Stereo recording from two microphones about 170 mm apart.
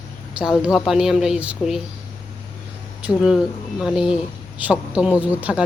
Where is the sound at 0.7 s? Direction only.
Centre (ahead or behind).